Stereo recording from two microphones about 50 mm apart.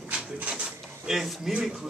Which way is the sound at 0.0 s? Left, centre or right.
Right.